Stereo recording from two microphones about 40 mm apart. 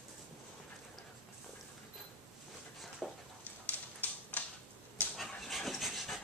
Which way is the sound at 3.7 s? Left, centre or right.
Left.